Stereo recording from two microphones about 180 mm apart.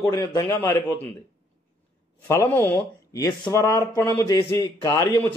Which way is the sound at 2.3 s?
15° left (ahead or behind).